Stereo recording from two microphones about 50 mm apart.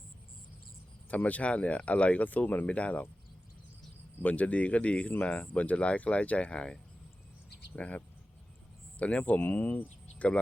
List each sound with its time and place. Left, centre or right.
1.1 s speech: left
4.2 s speech: left